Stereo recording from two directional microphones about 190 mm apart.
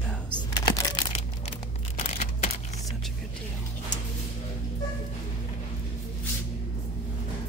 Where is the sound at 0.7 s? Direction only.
25° left (ahead or behind).